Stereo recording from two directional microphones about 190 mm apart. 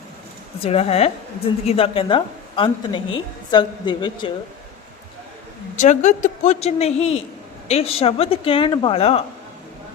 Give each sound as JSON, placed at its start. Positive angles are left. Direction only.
{"t": 0.6, "sound": "a woman's voice", "side_deg": 30}
{"t": 5.7, "sound": "speech", "side_deg": 40}